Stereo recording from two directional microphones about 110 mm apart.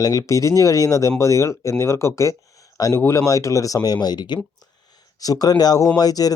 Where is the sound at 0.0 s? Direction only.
30° left (ahead or behind).